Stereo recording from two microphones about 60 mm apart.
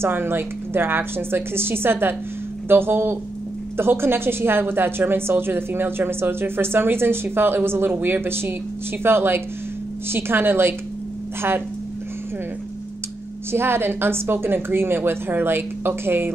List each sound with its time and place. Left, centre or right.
0.0 s a woman's voice: right
13.5 s a woman's voice: right